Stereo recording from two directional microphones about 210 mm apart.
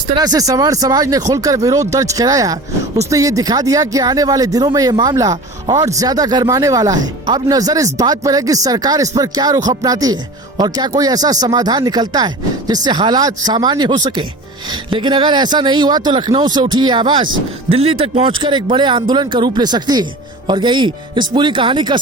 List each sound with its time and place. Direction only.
0.2 s speech: 15° right (ahead or behind)